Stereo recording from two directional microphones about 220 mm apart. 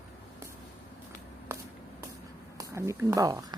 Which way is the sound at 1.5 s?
10° right (ahead or behind).